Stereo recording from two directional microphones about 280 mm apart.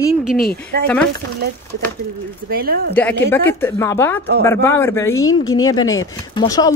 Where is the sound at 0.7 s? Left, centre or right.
Right.